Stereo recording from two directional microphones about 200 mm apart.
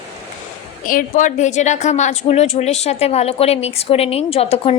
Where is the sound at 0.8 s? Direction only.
45° left (ahead or behind).